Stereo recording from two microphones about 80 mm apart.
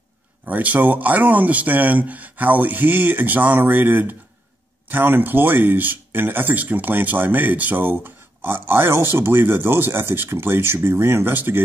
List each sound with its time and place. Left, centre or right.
0.5 s speech: right